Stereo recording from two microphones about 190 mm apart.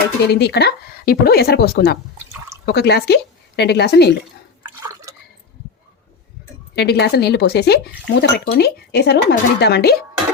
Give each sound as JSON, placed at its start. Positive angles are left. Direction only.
{"t": 0.3, "sound": "speech", "side_deg": 60}
{"t": 6.7, "sound": "speech", "side_deg": 60}